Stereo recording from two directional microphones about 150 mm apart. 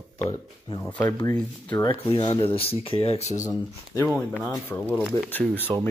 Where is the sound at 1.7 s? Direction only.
30° left (ahead or behind).